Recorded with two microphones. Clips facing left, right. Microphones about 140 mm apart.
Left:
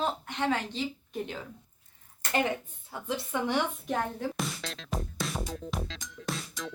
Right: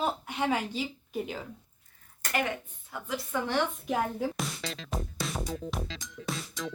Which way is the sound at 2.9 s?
30° left (ahead or behind).